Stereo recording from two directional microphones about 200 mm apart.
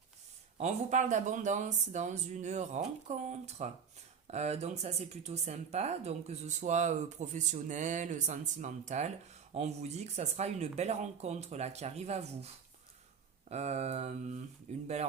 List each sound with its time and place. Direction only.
0.6 s speech: 35° right (ahead or behind)
13.5 s speech: 35° right (ahead or behind)